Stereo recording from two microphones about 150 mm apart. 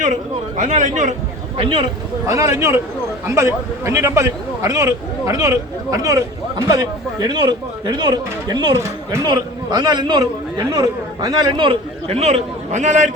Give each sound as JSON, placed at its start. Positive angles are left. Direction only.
{"t": 0.0, "sound": "speech", "side_deg": -55}
{"t": 1.5, "sound": "speech", "side_deg": -35}
{"t": 2.2, "sound": "speech", "side_deg": -20}